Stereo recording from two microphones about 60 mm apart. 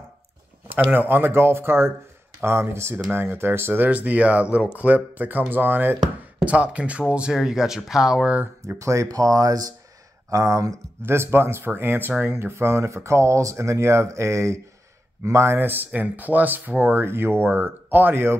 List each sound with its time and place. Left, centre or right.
0.9 s speech: right
6.4 s speech: right
8.7 s speech: right
10.3 s speech: right
11.0 s speech: right